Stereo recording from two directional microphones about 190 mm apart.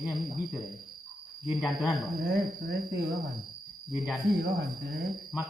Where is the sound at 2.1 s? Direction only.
50° right (ahead or behind).